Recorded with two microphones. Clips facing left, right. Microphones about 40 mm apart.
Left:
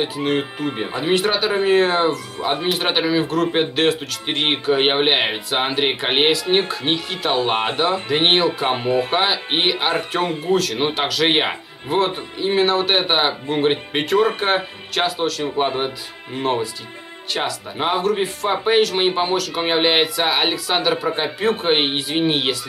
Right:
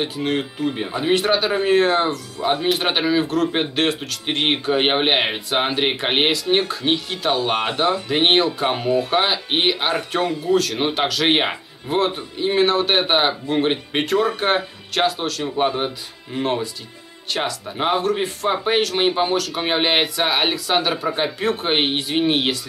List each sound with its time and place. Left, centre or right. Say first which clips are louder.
0.0 s speech: left 2 dB; centre
7.3 s speech: left 4 dB; left
8.1 s speech: even; centre
8.6 s speech: even; left
9.1 s speech: even; centre